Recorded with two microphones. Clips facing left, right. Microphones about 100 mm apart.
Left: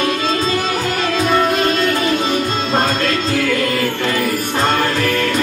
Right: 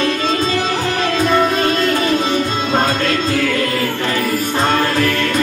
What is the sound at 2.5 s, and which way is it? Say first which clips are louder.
Music: right 1 dB; 5° right (ahead or behind).